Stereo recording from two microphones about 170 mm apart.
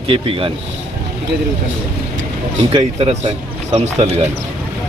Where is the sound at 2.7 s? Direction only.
40° right (ahead or behind).